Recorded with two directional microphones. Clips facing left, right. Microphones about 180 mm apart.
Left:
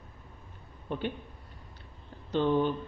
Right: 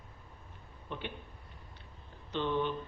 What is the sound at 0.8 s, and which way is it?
Speech, 40° left (ahead or behind).